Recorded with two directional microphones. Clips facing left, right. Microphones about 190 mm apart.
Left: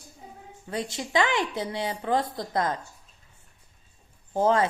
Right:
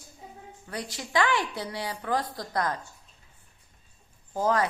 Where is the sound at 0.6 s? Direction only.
25° left (ahead or behind).